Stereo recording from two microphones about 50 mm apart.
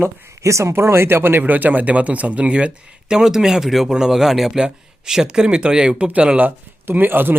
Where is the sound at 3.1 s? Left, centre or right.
Centre.